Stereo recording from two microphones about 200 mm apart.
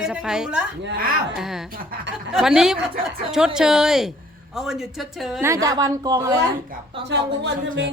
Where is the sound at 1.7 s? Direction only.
45° right (ahead or behind).